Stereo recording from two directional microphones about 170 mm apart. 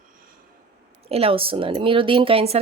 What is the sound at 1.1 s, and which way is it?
Speech, 35° right (ahead or behind).